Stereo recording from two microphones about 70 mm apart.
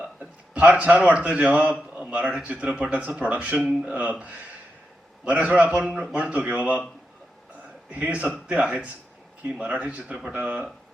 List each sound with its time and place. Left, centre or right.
0.0 s speech: centre
3.9 s speech: centre
7.9 s speech: centre